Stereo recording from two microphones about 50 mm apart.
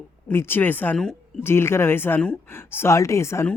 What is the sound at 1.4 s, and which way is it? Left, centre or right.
Speech, left.